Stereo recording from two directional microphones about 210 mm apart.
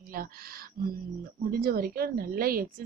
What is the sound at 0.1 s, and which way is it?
Speech, 45° right (ahead or behind).